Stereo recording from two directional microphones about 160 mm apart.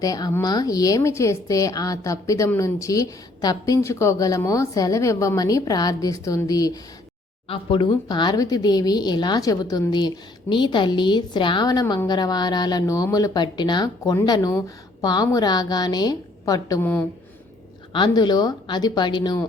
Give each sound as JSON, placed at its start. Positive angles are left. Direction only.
{"t": 0.0, "sound": "a woman's voice", "side_deg": 20}
{"t": 7.4, "sound": "a woman's voice", "side_deg": 35}
{"t": 17.9, "sound": "a woman's voice", "side_deg": 30}